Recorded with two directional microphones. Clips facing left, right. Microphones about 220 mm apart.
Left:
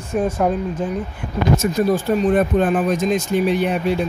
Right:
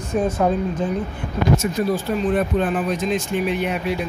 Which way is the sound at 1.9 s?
45° left (ahead or behind).